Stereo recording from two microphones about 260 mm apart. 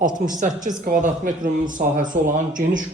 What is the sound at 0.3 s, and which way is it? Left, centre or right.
Speech, right.